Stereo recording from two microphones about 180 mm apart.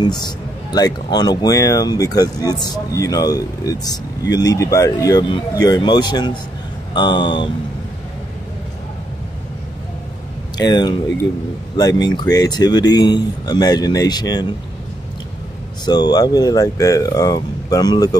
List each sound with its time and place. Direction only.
0.2 s speech: 20° left (ahead or behind)
10.6 s speech: 25° left (ahead or behind)
15.8 s speech: 25° left (ahead or behind)